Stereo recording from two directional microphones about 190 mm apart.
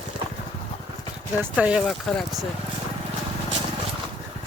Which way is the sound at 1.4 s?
5° right (ahead or behind).